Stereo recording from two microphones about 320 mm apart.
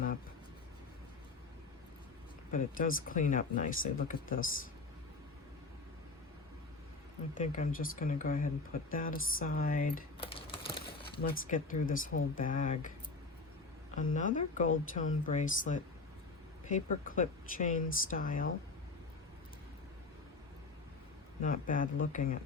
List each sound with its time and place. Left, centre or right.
2.5 s speech: left
7.3 s speech: left
11.2 s speech: left
14.1 s speech: left
21.4 s speech: left